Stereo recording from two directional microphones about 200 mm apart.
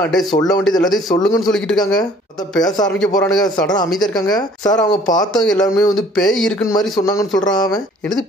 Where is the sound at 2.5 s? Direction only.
20° left (ahead or behind).